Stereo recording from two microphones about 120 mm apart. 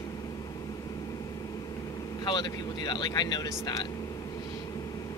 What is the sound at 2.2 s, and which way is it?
Speech, 40° left (ahead or behind).